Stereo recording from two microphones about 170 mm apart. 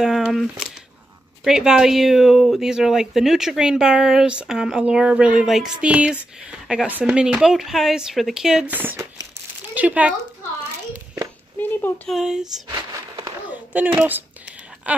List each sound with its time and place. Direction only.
0.0 s speech: centre (ahead or behind)
11.5 s speech: 10° left (ahead or behind)
12.1 s speech: 5° right (ahead or behind)
12.6 s a sound: 25° right (ahead or behind)
13.5 s speech: 10° right (ahead or behind)